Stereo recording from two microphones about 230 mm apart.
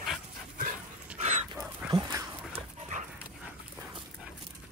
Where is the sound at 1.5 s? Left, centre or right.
Centre.